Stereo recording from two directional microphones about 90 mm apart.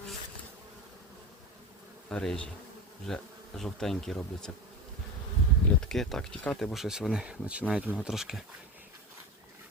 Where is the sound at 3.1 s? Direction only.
5° left (ahead or behind).